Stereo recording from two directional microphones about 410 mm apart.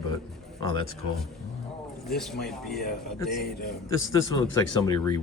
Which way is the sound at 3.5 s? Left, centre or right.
Left.